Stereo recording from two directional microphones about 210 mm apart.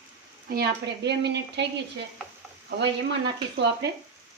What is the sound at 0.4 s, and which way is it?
Speech, 50° right (ahead or behind).